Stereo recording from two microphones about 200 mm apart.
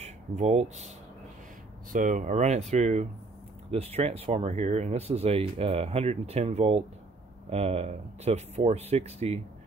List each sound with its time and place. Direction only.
0.0 s speech: 35° right (ahead or behind)